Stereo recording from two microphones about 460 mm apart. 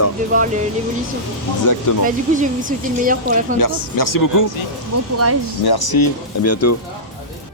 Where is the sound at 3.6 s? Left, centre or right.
Left.